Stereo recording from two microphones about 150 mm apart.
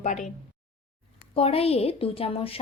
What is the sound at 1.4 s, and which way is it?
A woman's voice, 40° left (ahead or behind).